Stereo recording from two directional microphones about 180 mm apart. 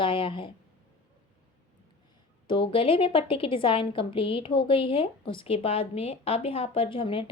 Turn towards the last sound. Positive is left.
turn(degrees=30)  # may be behind; listen again after turning